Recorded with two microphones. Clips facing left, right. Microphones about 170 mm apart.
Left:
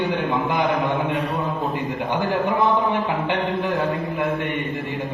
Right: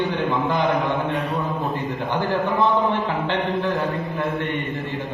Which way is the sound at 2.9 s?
15° left (ahead or behind).